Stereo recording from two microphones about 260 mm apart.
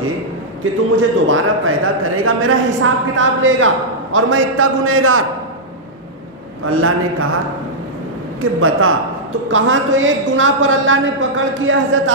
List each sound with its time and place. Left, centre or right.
0.9 s a man's voice: right
6.6 s a man's voice: right
8.4 s a man's voice: right